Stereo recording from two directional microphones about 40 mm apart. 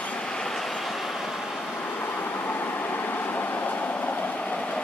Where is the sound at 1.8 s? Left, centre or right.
Left.